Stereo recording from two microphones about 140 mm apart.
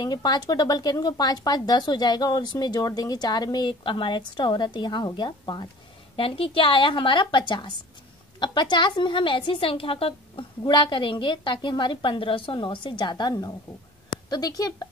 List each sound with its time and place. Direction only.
0.0 s a woman's voice: 30° left (ahead or behind)